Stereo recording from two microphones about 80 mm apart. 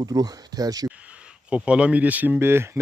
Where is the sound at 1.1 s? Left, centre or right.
Centre; by 2.7 s right.